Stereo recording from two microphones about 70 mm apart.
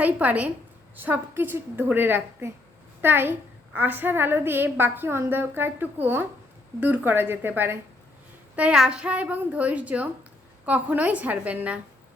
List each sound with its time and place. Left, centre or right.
0.0 s a woman's voice: right
8.5 s child singing: centre
8.8 s a woman's voice: centre